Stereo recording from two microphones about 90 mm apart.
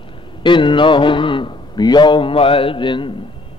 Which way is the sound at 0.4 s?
65° left (ahead or behind).